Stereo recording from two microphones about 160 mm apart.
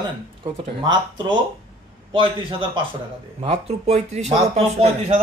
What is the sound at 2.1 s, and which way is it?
Speech, 30° right (ahead or behind).